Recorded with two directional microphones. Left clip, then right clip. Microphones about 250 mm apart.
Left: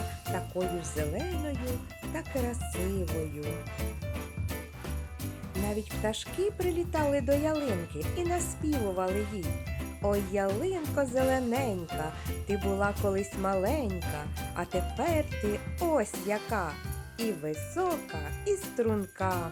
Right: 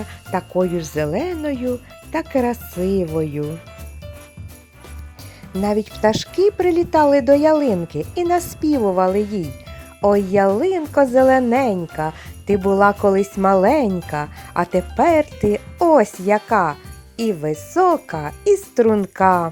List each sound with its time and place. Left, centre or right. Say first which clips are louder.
0.3 s speech: right 14 dB; right
6.0 s speech: right 16 dB; right